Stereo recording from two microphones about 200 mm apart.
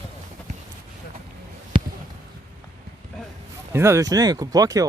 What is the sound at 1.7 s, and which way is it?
Basketball bounce, 25° right (ahead or behind).